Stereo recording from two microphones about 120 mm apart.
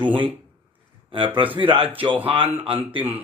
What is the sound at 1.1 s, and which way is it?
Speech, 45° right (ahead or behind).